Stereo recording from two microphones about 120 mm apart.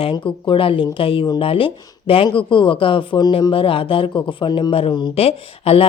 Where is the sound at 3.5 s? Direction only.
50° left (ahead or behind).